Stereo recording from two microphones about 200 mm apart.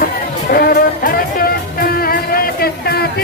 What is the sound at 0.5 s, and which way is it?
Music, 45° left (ahead or behind).